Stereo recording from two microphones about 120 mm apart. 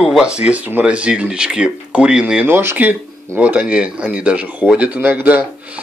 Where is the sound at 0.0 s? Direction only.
5° right (ahead or behind).